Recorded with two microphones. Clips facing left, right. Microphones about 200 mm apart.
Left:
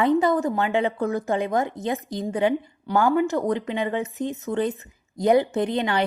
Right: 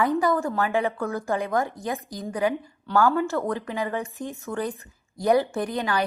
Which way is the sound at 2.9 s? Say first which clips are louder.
Left 2 dB; 15° left (ahead or behind).